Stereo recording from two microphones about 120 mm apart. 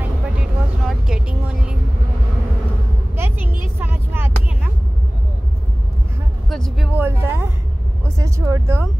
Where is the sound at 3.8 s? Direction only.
15° right (ahead or behind).